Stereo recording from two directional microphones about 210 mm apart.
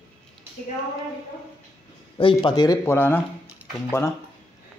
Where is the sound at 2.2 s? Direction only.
25° left (ahead or behind).